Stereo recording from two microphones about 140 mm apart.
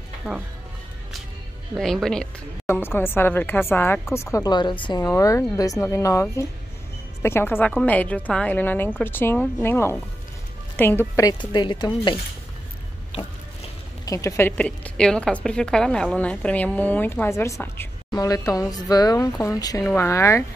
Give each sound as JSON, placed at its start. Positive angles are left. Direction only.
{"t": 1.8, "sound": "speech", "side_deg": 5}
{"t": 2.6, "sound": "a woman's voice", "side_deg": 15}
{"t": 5.0, "sound": "speech", "side_deg": 20}
{"t": 7.2, "sound": "a woman's voice", "side_deg": 15}
{"t": 14.0, "sound": "a woman's voice", "side_deg": 20}